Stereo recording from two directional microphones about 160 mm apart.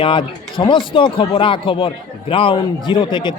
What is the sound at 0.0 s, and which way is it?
Speech, 30° left (ahead or behind).